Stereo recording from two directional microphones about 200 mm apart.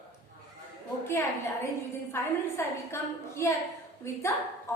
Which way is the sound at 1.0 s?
15° left (ahead or behind).